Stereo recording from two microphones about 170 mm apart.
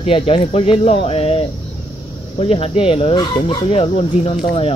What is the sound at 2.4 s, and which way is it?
Speech, 35° left (ahead or behind).